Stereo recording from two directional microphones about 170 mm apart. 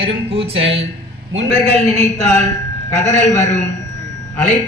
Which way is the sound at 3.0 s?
40° left (ahead or behind).